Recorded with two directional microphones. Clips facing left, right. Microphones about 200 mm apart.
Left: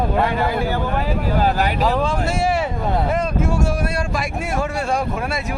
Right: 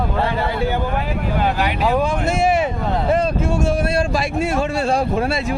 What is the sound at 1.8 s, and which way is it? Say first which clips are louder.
Speech: right 1 dB; 10° right (ahead or behind).